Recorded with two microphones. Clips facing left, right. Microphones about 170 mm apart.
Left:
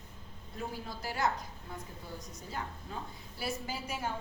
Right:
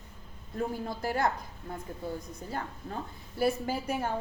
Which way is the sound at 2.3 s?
55° right (ahead or behind).